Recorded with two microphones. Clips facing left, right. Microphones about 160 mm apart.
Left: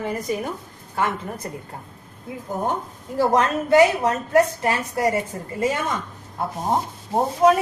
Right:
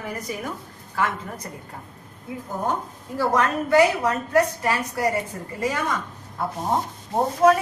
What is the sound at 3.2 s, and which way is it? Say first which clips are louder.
A woman's voice: left 3 dB; 20° left (ahead or behind).